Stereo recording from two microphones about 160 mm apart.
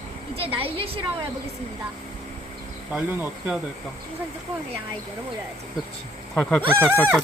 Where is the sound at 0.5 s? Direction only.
35° right (ahead or behind).